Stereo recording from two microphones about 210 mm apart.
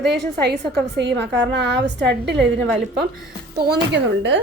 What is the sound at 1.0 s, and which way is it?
A woman's voice, 55° right (ahead or behind).